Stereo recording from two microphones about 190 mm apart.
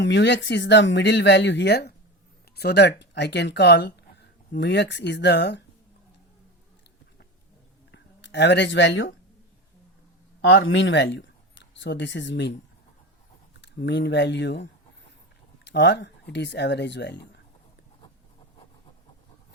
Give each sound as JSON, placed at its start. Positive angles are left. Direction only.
{"t": 0.0, "sound": "speech", "side_deg": 65}
{"t": 7.9, "sound": "speech", "side_deg": 65}
{"t": 10.5, "sound": "speech", "side_deg": 80}
{"t": 13.6, "sound": "speech", "side_deg": 65}